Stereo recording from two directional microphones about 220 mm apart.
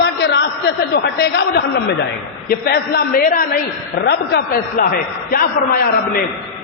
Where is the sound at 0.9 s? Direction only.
50° left (ahead or behind).